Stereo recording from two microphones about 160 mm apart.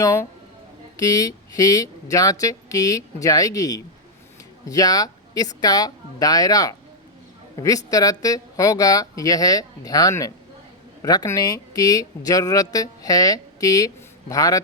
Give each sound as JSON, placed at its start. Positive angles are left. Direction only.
{"t": 0.0, "sound": "speech", "side_deg": 20}